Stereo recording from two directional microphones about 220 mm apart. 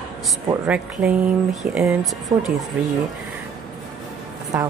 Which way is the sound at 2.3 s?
15° right (ahead or behind).